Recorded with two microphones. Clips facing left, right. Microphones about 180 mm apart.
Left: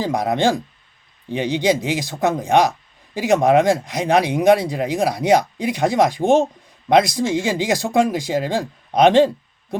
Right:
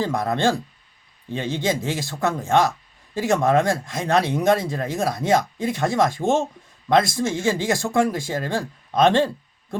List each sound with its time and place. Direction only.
0.0 s speech: 15° left (ahead or behind)